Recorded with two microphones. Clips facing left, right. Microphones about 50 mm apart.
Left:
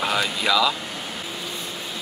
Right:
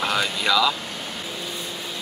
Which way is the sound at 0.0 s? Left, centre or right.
Centre.